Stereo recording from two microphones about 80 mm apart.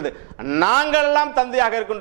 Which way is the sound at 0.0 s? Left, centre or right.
Centre.